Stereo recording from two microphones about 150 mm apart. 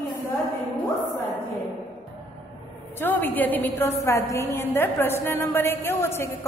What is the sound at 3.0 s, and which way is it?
A woman's voice, 10° left (ahead or behind).